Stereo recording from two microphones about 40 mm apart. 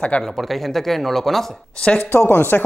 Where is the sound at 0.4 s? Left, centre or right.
Centre.